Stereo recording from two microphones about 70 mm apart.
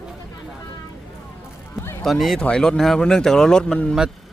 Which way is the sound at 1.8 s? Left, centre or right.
Left.